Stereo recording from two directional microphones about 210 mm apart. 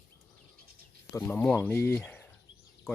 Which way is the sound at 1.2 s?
5° left (ahead or behind).